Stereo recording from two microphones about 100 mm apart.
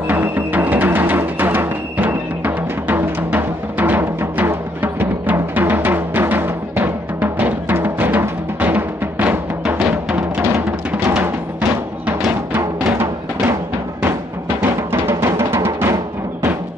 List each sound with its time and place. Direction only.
0.1 s music: 20° right (ahead or behind)
12.5 s music: 20° right (ahead or behind)
14.6 s music: 20° right (ahead or behind)